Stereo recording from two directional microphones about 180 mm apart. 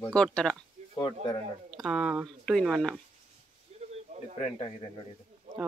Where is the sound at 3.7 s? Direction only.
35° right (ahead or behind).